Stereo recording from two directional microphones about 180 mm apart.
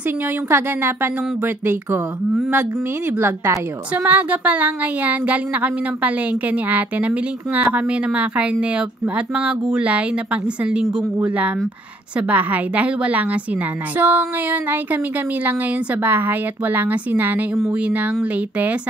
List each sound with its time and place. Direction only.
0.5 s a woman's voice: 15° right (ahead or behind)